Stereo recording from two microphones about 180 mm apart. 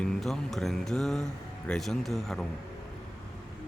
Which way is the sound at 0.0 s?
5° left (ahead or behind).